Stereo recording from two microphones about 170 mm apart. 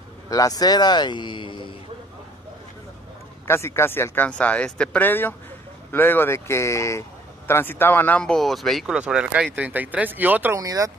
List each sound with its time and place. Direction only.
0.3 s speech: 20° left (ahead or behind)
3.4 s speech: 15° left (ahead or behind); by 10.9 s 20° right (ahead or behind)